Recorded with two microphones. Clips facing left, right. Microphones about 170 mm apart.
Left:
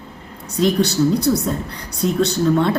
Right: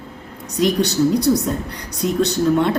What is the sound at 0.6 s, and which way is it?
A woman's voice, 15° right (ahead or behind).